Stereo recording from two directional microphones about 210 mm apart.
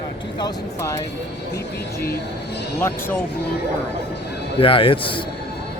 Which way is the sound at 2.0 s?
55° left (ahead or behind).